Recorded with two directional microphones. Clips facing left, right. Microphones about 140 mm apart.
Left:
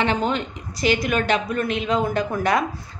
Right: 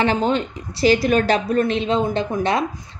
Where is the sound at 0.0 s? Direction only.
35° right (ahead or behind).